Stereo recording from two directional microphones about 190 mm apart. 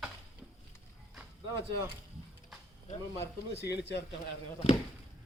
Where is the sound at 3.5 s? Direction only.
60° left (ahead or behind).